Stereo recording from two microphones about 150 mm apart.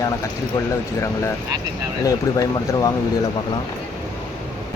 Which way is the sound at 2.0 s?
25° left (ahead or behind).